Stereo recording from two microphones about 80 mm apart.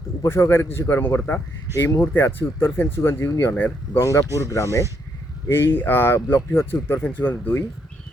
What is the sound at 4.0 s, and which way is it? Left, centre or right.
Speech, left.